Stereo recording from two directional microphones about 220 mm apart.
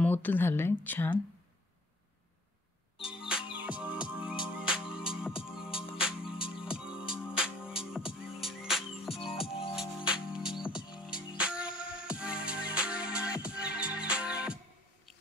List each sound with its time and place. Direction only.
0.0 s speech: 10° left (ahead or behind)
3.0 s music: 25° left (ahead or behind)
3.3 s music: 5° right (ahead or behind)
5.7 s music: 25° left (ahead or behind)
6.6 s music: 5° right (ahead or behind)
9.1 s music: 25° left (ahead or behind)
9.8 s music: 5° right (ahead or behind)